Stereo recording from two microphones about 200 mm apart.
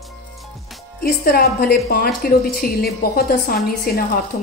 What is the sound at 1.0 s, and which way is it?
A woman's voice, 50° left (ahead or behind).